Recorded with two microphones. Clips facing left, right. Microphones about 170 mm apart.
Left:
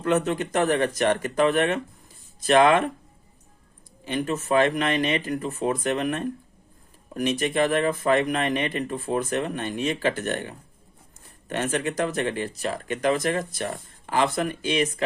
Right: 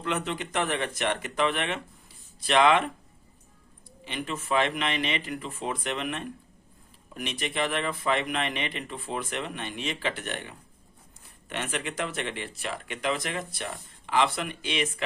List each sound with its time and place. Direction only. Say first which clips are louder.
0.0 s speech: left 8 dB; 45° left (ahead or behind)
4.0 s speech: left 7 dB; 45° left (ahead or behind)